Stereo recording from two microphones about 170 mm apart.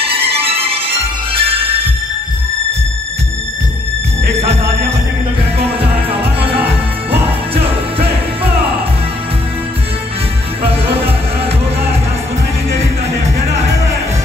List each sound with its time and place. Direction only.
0.0 s music: 35° right (ahead or behind)